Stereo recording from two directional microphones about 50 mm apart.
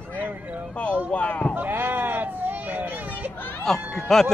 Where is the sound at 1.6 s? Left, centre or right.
Right.